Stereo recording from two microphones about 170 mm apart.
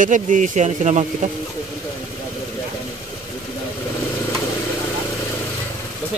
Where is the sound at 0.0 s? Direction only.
50° right (ahead or behind).